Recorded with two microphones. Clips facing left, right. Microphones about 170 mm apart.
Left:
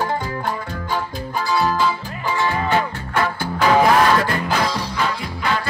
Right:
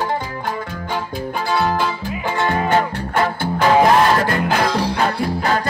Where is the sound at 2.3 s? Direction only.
55° right (ahead or behind).